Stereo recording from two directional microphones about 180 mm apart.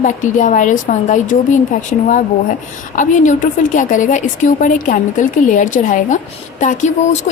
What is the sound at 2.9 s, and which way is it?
A woman's voice, 45° left (ahead or behind).